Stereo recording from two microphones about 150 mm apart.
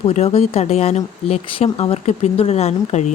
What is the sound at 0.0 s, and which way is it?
Speech, 45° left (ahead or behind).